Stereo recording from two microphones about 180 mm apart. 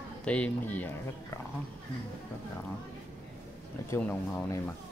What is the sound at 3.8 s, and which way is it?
Speech, 15° left (ahead or behind).